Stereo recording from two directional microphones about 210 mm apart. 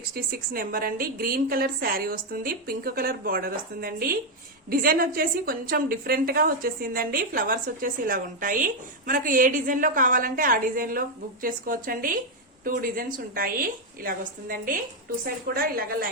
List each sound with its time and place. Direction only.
0.1 s a woman's voice: 45° right (ahead or behind)